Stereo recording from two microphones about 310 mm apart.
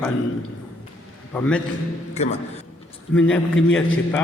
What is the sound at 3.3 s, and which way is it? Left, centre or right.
Speech, centre.